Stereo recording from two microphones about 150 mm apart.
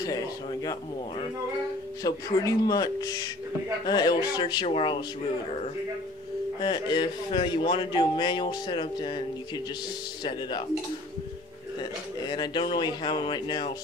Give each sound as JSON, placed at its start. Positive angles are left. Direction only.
{"t": 0.0, "sound": "speech", "side_deg": 25}
{"t": 2.0, "sound": "speech", "side_deg": 25}
{"t": 6.6, "sound": "speech", "side_deg": 30}
{"t": 11.8, "sound": "speech", "side_deg": 30}